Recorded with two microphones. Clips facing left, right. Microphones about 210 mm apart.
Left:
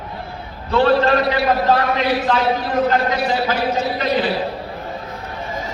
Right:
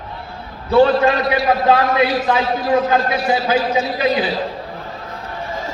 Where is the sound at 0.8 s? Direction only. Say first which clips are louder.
Right 2 dB; 60° left (ahead or behind).